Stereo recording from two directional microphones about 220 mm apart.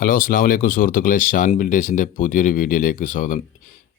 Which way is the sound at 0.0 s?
40° left (ahead or behind).